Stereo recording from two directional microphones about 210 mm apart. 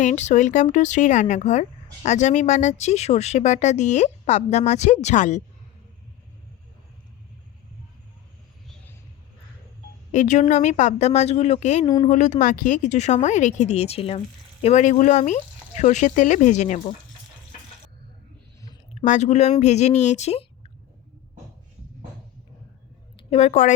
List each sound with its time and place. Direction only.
0.0 s speech: 35° left (ahead or behind)
10.1 s speech: 35° left (ahead or behind)
18.9 s speech: 35° left (ahead or behind)
23.1 s a woman's voice: 30° left (ahead or behind)